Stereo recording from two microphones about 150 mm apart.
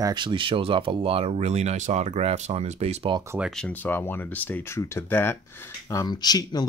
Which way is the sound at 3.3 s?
5° right (ahead or behind).